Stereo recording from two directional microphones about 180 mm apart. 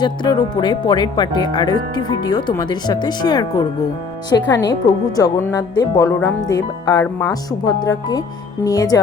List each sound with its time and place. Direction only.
0.0 s speech: 25° left (ahead or behind)